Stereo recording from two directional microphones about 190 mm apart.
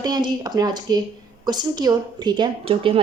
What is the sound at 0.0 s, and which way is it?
A woman's voice, 20° right (ahead or behind).